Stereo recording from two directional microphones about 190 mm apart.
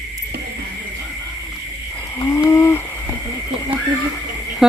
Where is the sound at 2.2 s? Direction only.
15° left (ahead or behind).